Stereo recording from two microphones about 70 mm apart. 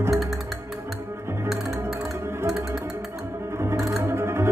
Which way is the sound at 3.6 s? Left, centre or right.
Right.